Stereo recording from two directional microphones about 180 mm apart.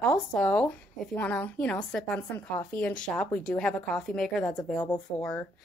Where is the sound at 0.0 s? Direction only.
5° left (ahead or behind).